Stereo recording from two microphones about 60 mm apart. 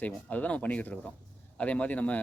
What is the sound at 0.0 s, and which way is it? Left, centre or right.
Speech, left.